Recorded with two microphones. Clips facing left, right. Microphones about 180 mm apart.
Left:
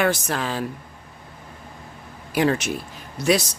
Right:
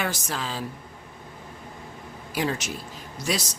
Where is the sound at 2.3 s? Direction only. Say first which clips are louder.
Left 7 dB; 60° left (ahead or behind).